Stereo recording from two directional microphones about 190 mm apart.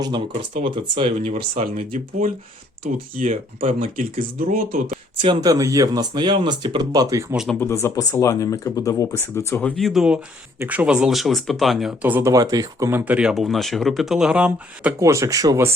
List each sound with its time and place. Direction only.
0.5 s speech: 30° right (ahead or behind); by 4.9 s 50° right (ahead or behind)
5.2 s speech: 20° right (ahead or behind)
7.6 s speech: 15° left (ahead or behind); by 15.7 s 15° right (ahead or behind)